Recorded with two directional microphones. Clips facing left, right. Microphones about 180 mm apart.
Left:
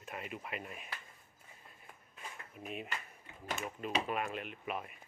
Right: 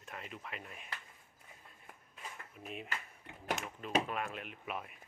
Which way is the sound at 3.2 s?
70° right (ahead or behind).